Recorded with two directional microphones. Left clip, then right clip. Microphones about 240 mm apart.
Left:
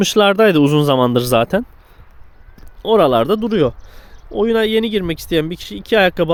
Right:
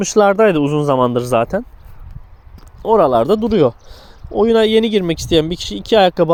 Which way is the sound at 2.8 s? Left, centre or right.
Centre.